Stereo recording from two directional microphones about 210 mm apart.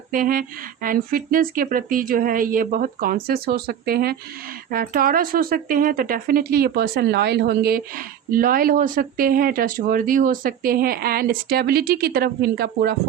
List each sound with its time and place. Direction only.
0.1 s speech: 40° right (ahead or behind)